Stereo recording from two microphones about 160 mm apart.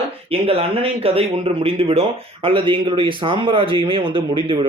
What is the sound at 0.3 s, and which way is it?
Speech, 35° right (ahead or behind).